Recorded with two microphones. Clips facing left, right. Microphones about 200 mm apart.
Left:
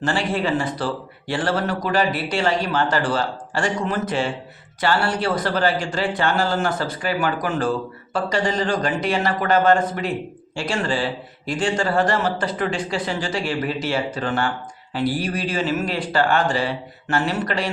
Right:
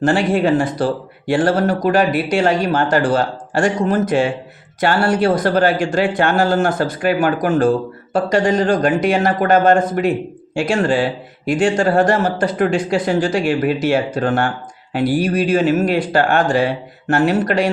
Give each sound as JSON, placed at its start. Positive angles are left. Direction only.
{"t": 0.0, "sound": "speech", "side_deg": -50}